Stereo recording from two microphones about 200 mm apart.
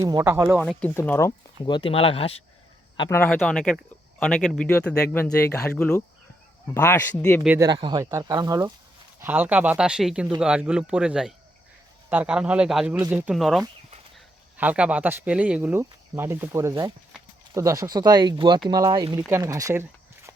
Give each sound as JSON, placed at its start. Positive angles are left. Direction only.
{"t": 0.0, "sound": "speech", "side_deg": -15}
{"t": 0.6, "sound": "speech", "side_deg": 5}
{"t": 3.0, "sound": "speech", "side_deg": 10}
{"t": 7.4, "sound": "speech", "side_deg": -10}
{"t": 7.7, "sound": "speech", "side_deg": -20}